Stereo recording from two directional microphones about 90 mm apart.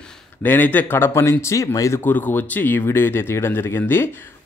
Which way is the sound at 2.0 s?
20° left (ahead or behind).